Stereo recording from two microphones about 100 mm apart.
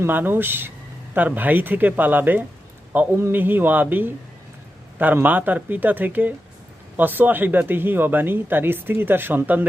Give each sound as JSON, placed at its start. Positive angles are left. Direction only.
{"t": 0.0, "sound": "speech", "side_deg": -20}